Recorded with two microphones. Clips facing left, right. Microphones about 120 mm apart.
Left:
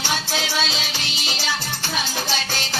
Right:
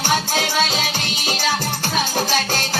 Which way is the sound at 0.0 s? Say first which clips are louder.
Right 5 dB; 50° right (ahead or behind).